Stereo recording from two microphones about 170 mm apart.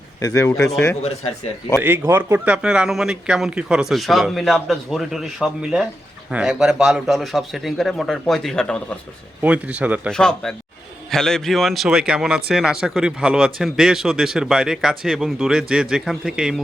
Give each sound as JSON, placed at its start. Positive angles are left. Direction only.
{"t": 0.2, "sound": "speech", "side_deg": 20}
{"t": 1.8, "sound": "speech", "side_deg": -10}
{"t": 9.4, "sound": "speech", "side_deg": -10}
{"t": 10.1, "sound": "speech", "side_deg": 5}